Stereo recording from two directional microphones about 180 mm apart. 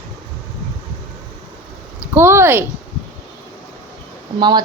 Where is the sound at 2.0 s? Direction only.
10° right (ahead or behind).